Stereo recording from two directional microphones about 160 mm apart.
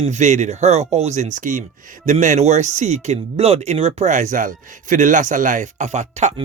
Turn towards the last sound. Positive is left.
turn(degrees=-45)  # may be behind; listen again after turning